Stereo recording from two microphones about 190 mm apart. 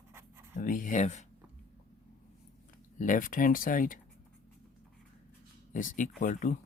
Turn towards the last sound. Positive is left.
turn(degrees=45)  # may be behind; listen again after turning